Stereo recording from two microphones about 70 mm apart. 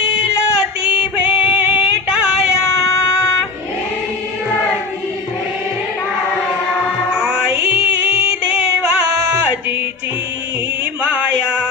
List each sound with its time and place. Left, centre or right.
0.9 s female singing: centre
7.1 s music: centre
11.0 s a sound: centre